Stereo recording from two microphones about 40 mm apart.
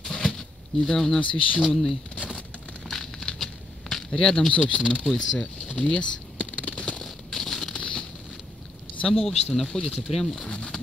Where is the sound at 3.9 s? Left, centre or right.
Centre.